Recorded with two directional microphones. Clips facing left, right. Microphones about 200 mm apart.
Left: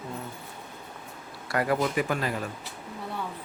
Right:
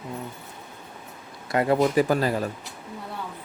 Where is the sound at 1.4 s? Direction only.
25° right (ahead or behind).